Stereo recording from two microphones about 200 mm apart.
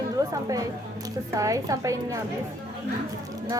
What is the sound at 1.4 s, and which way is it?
Speech, 15° right (ahead or behind).